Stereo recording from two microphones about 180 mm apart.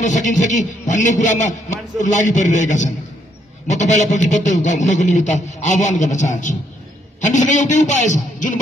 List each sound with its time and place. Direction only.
0.0 s a man's voice: 45° left (ahead or behind)